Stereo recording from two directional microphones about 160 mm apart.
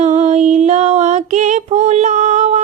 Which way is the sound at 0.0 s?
45° right (ahead or behind).